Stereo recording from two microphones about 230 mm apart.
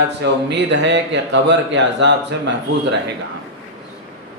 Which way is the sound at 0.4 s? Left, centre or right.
Right.